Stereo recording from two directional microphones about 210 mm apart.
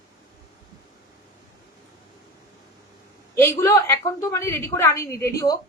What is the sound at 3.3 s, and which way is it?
A woman's voice, 10° left (ahead or behind).